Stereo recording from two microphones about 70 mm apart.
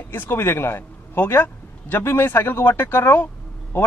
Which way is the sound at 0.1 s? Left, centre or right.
Left.